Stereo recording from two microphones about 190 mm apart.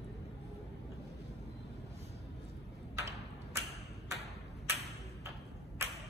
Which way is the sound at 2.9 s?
15° right (ahead or behind).